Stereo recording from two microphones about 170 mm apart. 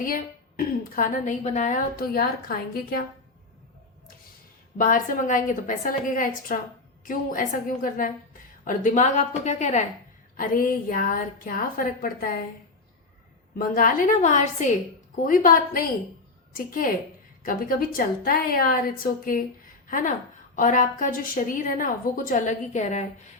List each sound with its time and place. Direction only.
0.0 s a woman's voice: 55° left (ahead or behind)
4.8 s a woman's voice: 55° left (ahead or behind)
10.3 s a woman's voice: 55° left (ahead or behind)
13.6 s a woman's voice: 55° left (ahead or behind)